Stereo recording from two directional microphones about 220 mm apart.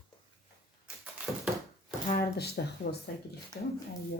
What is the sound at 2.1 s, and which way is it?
Speech, 45° left (ahead or behind).